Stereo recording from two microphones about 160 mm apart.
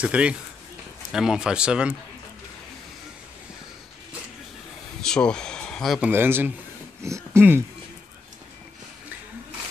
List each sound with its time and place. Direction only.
0.0 s speech: 5° right (ahead or behind)
5.0 s a sound: 5° left (ahead or behind)
5.9 s speech: 10° right (ahead or behind)